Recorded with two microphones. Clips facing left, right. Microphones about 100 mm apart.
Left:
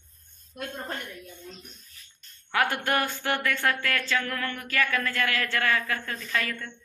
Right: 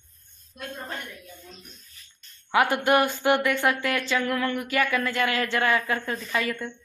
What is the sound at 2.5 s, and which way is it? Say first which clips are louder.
Speech: right 5 dB; 10° right (ahead or behind).